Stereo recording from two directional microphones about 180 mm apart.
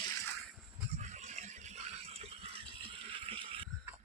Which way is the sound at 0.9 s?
40° right (ahead or behind).